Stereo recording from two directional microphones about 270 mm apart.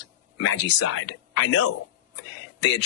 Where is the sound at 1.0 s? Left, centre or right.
Left.